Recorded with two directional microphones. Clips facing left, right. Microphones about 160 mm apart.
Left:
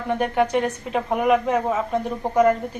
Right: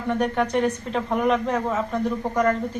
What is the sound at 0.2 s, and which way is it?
Speech, 5° left (ahead or behind).